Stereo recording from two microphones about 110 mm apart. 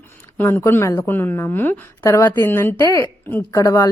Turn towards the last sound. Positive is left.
turn(degrees=30)  # may be behind; listen again after turning